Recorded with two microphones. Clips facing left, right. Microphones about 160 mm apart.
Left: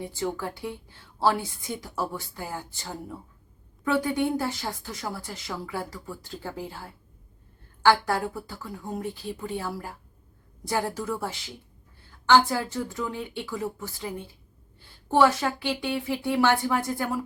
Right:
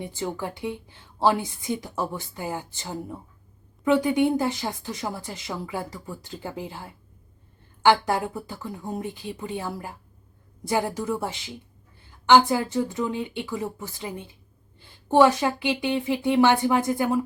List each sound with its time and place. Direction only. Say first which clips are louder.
0.0 s a woman's voice: even; 20° right (ahead or behind)